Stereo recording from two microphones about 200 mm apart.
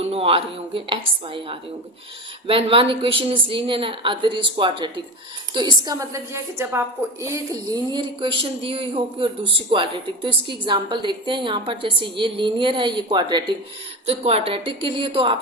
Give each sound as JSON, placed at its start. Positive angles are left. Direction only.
{"t": 0.0, "sound": "a woman's voice", "side_deg": -30}